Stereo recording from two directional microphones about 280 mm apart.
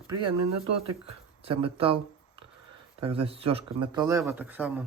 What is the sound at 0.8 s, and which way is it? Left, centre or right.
Speech, centre.